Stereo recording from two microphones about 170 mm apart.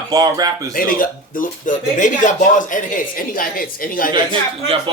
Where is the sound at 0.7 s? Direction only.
55° left (ahead or behind).